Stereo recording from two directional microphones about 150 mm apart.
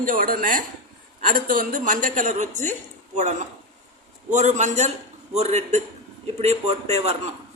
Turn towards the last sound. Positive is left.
turn(degrees=-45)  # may be behind; listen again after turning